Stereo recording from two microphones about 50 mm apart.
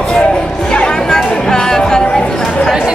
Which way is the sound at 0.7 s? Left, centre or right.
Centre.